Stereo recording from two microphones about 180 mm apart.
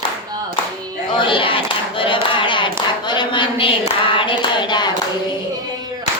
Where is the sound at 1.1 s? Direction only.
25° left (ahead or behind).